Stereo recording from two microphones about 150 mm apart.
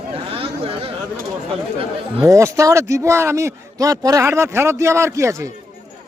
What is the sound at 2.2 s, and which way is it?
A man's voice, 20° right (ahead or behind).